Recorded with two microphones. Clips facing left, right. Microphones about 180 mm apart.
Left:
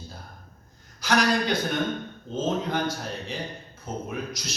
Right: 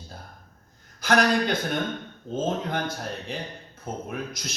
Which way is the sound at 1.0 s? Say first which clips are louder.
Right 2 dB; 55° right (ahead or behind).